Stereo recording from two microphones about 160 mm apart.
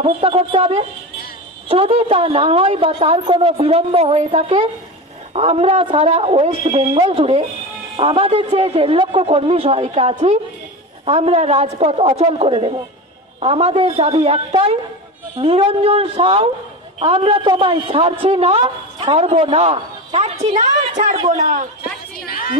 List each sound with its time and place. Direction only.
0.0 s a woman's voice: 35° right (ahead or behind)
22.1 s a woman's voice: 65° left (ahead or behind)